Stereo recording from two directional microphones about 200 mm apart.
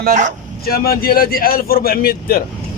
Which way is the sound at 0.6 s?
50° left (ahead or behind).